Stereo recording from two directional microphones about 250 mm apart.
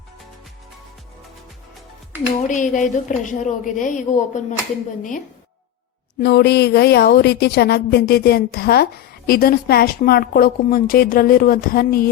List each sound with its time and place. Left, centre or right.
2.5 s speech: left
6.1 s speech: left